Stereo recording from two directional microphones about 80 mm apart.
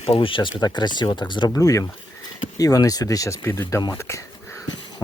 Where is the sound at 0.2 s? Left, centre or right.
Left.